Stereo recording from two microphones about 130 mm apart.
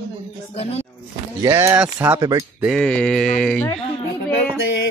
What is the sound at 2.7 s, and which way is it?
Speech, 5° left (ahead or behind).